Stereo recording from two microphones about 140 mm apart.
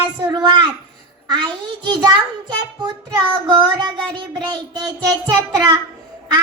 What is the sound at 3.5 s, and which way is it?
Child singing, 30° right (ahead or behind).